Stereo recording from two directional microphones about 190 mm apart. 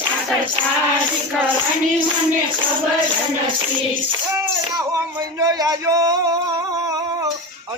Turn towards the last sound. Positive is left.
turn(degrees=-20)  # may be behind; listen again after turning